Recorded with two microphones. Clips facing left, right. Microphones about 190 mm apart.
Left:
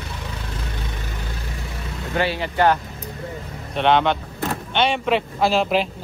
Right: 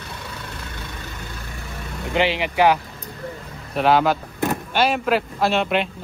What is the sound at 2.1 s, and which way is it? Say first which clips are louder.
A man's voice: right 2 dB; 15° right (ahead or behind).